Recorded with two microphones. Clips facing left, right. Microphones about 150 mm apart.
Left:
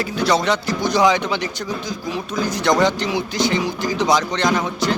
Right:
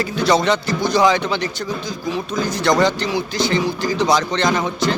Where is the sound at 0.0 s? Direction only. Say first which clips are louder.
Right 2 dB; 10° left (ahead or behind).